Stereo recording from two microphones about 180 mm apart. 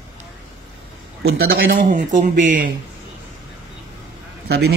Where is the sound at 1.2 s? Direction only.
60° right (ahead or behind); by 2.6 s 45° right (ahead or behind).